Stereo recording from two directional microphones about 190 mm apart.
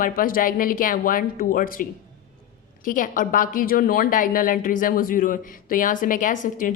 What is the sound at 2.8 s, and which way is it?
A woman's voice, 45° left (ahead or behind).